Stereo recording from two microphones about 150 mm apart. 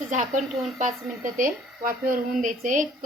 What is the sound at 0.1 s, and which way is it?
Speech, 60° right (ahead or behind).